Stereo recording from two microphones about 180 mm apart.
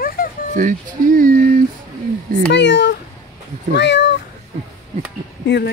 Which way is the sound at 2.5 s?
80° left.